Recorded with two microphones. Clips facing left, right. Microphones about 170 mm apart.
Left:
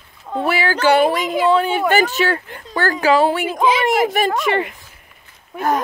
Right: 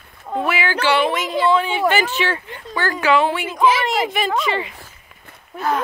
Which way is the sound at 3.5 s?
15° left (ahead or behind).